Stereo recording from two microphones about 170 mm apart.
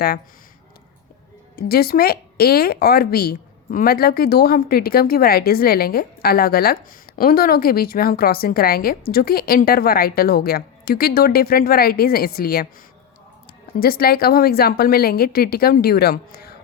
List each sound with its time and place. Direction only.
1.5 s a woman's voice: 65° left (ahead or behind)
13.7 s a woman's voice: 65° left (ahead or behind)